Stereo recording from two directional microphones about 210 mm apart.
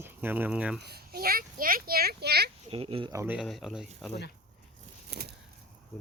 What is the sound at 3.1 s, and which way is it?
Speech, 15° right (ahead or behind).